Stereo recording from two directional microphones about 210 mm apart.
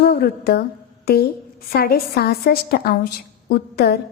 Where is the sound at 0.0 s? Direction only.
45° left (ahead or behind).